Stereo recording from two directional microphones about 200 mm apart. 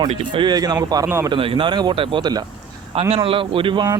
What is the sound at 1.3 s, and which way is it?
Speech, 25° right (ahead or behind).